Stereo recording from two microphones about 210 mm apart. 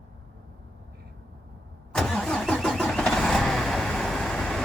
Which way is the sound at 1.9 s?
5° left (ahead or behind).